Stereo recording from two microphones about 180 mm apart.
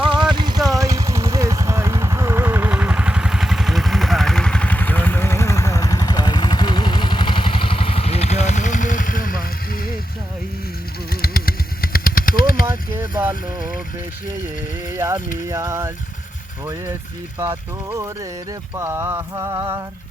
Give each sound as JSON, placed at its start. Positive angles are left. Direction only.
{"t": 0.0, "sound": "vehicle", "side_deg": -30}
{"t": 11.1, "sound": "vehicle", "side_deg": 55}
{"t": 12.6, "sound": "boat", "side_deg": -10}
{"t": 14.8, "sound": "boat", "side_deg": -15}
{"t": 15.4, "sound": "a sound", "side_deg": -15}
{"t": 17.4, "sound": "a sound", "side_deg": -15}